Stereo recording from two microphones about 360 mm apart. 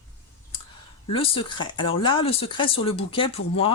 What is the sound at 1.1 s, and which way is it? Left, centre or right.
Speech, centre.